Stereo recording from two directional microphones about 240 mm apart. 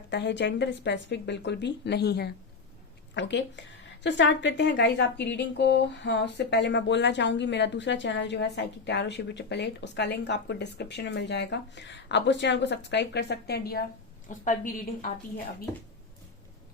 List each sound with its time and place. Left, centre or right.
0.1 s a woman's voice: left